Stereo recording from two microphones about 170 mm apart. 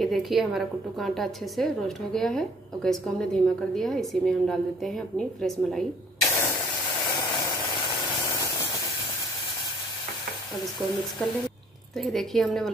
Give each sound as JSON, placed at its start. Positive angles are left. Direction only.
{"t": 0.0, "sound": "a woman's voice", "side_deg": 0}
{"t": 6.2, "sound": "spray", "side_deg": 15}
{"t": 6.9, "sound": "a sound", "side_deg": 25}
{"t": 12.0, "sound": "a woman's voice", "side_deg": 0}